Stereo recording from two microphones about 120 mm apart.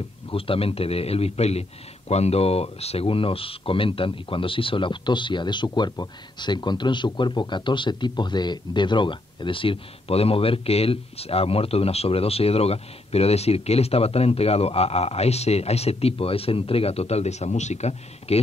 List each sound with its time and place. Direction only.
0.3 s a man's voice: 50° left (ahead or behind)